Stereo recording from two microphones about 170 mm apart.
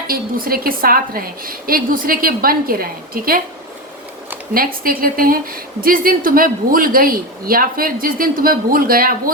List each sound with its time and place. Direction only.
0.1 s a woman's voice: 60° right (ahead or behind)
4.5 s a woman's voice: 60° right (ahead or behind)